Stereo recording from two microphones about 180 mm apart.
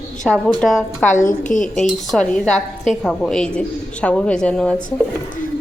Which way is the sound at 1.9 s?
Centre (ahead or behind).